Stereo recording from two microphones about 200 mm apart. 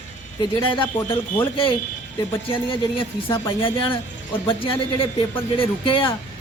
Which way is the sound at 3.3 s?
25° left (ahead or behind).